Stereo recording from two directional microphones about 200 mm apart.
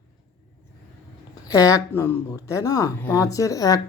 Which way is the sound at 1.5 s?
15° left (ahead or behind).